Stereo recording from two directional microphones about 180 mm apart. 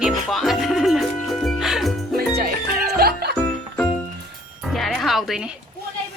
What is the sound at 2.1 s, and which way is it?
Music, 55° right (ahead or behind).